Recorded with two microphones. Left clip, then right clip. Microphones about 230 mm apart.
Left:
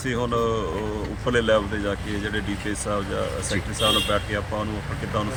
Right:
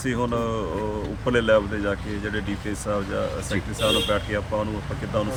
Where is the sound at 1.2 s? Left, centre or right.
Right.